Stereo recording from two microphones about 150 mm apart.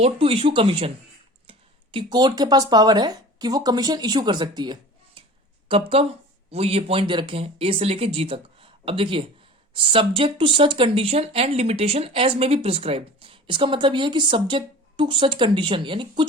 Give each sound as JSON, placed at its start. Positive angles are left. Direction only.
{"t": 0.0, "sound": "speech", "side_deg": -40}